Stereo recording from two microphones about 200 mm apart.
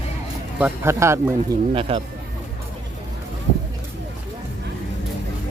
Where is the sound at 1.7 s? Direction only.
25° right (ahead or behind).